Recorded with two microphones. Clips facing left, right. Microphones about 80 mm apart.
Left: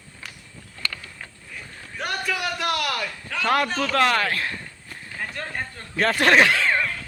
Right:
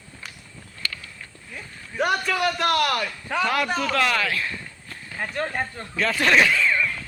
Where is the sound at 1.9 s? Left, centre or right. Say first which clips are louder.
Right 5 dB; centre.